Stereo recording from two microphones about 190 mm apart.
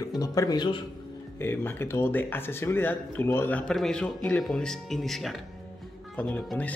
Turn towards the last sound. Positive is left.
turn(degrees=10)  # may be behind; listen again after turning